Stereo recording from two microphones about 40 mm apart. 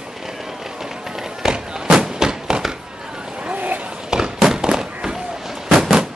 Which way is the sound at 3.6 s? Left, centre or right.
Right.